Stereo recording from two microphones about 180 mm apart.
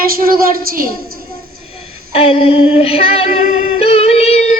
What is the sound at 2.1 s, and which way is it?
Female singing, 35° left (ahead or behind).